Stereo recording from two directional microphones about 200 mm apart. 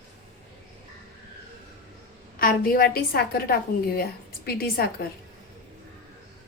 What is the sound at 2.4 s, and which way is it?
A woman's voice, 45° left (ahead or behind).